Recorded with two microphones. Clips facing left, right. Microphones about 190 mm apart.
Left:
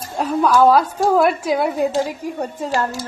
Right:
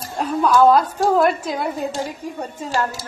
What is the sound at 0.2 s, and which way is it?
A woman's voice, 10° left (ahead or behind).